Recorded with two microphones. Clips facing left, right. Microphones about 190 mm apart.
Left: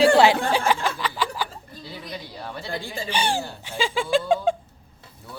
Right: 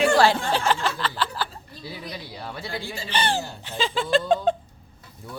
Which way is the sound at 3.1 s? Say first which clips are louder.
Even; 10° left (ahead or behind).